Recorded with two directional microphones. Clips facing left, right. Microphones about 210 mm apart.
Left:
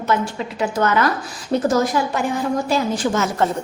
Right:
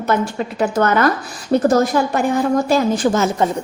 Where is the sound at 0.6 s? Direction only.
50° right (ahead or behind).